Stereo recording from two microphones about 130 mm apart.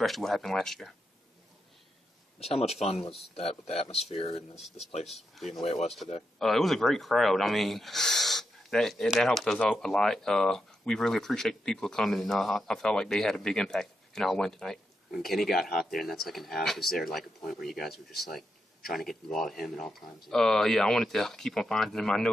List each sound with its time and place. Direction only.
0.0 s speech: centre (ahead or behind)
2.4 s speech: 50° left (ahead or behind)
5.0 s speech: centre (ahead or behind)
5.5 s speech: 50° left (ahead or behind)
6.4 s speech: centre (ahead or behind)